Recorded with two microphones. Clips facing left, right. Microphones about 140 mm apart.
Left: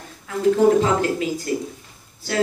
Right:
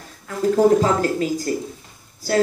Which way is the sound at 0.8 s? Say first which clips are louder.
Right 1 dB; 40° right (ahead or behind).